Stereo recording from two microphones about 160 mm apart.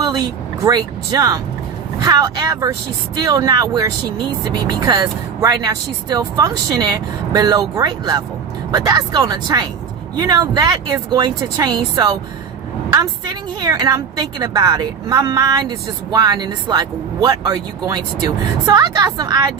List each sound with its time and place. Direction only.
0.0 s speech: 25° right (ahead or behind)